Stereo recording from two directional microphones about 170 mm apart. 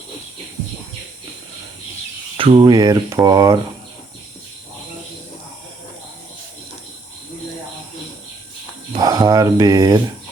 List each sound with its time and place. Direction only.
2.4 s speech: 30° right (ahead or behind)
8.9 s speech: 25° right (ahead or behind)